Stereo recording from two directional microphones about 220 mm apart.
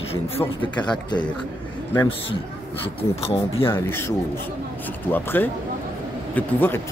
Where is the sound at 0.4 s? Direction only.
20° left (ahead or behind).